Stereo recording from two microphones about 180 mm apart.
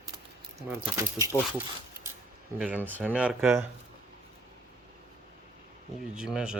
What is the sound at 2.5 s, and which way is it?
Speech, 10° right (ahead or behind).